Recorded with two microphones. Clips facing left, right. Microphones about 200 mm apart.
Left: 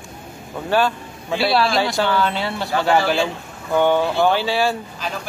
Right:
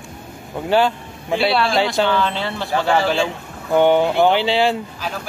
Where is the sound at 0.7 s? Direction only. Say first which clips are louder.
Right 2 dB; 20° right (ahead or behind).